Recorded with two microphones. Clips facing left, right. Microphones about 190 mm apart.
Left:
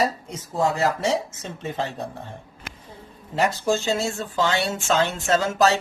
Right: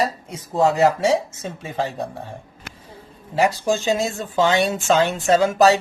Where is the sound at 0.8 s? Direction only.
10° right (ahead or behind).